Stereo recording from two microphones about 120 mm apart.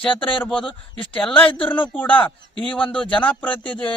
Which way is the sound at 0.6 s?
45° left (ahead or behind).